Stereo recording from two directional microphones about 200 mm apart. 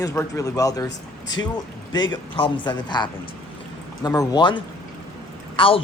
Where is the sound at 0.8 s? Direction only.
65° left (ahead or behind).